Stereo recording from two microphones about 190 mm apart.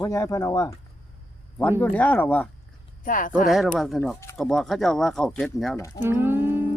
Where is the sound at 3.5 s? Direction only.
Centre (ahead or behind).